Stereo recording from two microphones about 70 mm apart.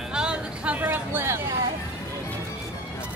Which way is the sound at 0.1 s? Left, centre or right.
Centre.